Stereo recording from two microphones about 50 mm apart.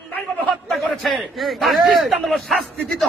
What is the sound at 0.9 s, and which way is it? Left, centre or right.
Speech, centre.